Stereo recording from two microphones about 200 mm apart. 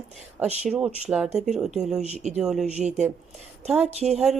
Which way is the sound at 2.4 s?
Centre (ahead or behind).